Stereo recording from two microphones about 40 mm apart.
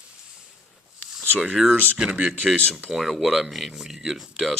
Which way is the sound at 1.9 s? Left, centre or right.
Right.